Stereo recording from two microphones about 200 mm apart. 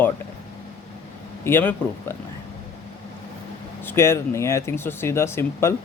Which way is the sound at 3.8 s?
10° left (ahead or behind).